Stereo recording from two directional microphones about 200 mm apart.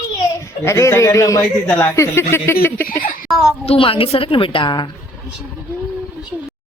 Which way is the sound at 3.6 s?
30° left (ahead or behind).